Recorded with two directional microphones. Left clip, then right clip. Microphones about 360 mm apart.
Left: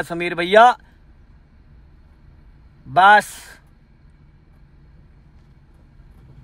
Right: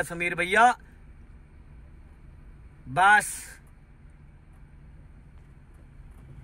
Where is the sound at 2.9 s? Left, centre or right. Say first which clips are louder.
Left 8 dB; centre.